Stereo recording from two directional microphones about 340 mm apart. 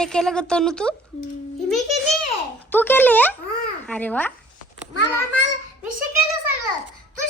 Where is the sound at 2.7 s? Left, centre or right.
Centre.